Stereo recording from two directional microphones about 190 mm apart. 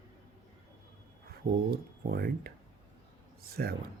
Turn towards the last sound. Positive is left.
turn(degrees=-55)  # may be behind; listen again after turning